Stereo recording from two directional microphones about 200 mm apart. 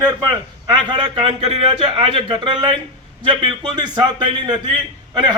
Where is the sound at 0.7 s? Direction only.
25° right (ahead or behind).